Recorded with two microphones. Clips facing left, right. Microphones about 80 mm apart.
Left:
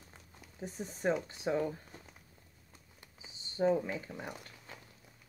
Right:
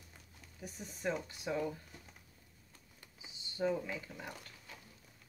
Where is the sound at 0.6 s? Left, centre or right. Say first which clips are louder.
Left 7 dB; left.